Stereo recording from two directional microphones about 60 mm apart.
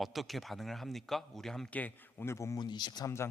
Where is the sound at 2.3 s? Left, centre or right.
Left.